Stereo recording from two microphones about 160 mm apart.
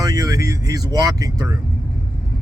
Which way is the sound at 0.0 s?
25° right (ahead or behind).